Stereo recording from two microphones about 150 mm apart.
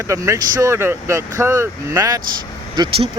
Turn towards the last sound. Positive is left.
turn(degrees=-30)  # may be behind; listen again after turning